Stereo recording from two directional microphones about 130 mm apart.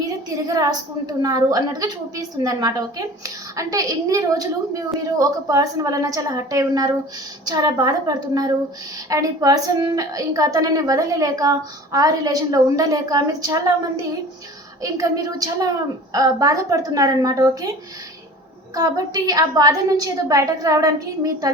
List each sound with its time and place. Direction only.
0.4 s a woman's voice: 30° right (ahead or behind)